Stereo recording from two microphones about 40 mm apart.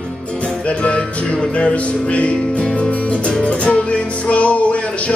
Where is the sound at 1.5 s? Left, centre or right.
Left.